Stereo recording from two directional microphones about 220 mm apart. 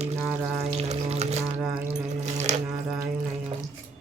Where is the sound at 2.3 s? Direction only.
30° right (ahead or behind).